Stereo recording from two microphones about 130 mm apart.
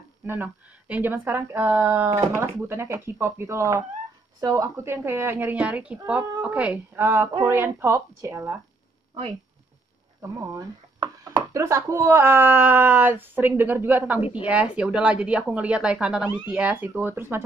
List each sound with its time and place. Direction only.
0.3 s speech: 15° right (ahead or behind)
10.5 s speech: 30° right (ahead or behind)